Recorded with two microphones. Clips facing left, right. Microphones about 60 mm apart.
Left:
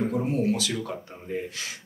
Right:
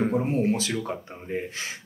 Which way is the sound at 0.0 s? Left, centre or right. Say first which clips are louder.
Right 2 dB; right.